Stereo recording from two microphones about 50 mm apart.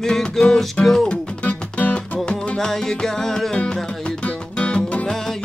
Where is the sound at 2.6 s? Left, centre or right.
Centre.